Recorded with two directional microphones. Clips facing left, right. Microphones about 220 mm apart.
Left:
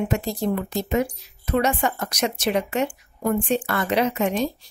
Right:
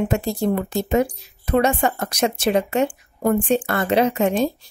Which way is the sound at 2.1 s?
30° right (ahead or behind).